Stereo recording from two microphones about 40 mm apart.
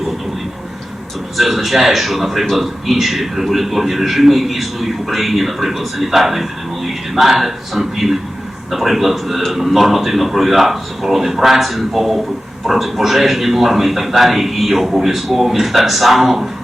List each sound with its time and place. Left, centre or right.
1.4 s a man's voice: centre